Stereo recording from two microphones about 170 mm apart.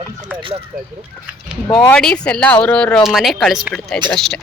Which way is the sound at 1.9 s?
5° left (ahead or behind).